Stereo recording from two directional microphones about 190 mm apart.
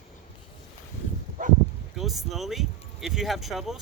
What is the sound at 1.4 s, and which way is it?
Bow-wow, 45° right (ahead or behind).